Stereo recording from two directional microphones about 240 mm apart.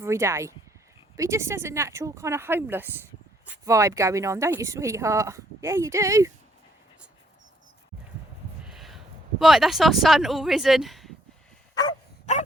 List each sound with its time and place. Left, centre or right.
0.0 s speech: centre
8.6 s a sound: centre
9.4 s speech: centre
11.7 s dog: centre
12.2 s dog: left